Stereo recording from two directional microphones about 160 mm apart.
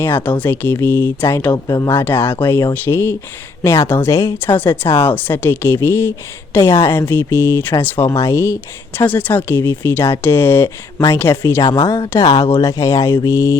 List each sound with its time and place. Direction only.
0.0 s speech: 10° left (ahead or behind)
1.5 s speech: 20° left (ahead or behind)
12.6 s mantra: 20° left (ahead or behind)